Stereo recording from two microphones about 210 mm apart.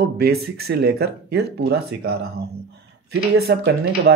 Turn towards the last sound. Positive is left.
turn(degrees=-50)  # may be behind; listen again after turning